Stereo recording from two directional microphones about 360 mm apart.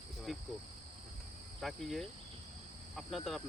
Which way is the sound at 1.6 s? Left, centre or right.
Centre.